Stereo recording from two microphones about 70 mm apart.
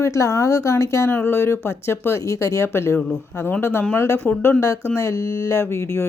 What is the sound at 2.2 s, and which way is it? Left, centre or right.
Speech, left.